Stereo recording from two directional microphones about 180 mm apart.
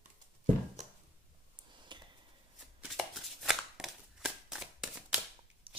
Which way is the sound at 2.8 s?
Centre (ahead or behind).